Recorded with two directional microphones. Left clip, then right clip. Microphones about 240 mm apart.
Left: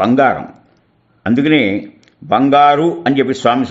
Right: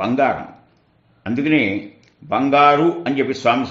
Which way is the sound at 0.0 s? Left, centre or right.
Left.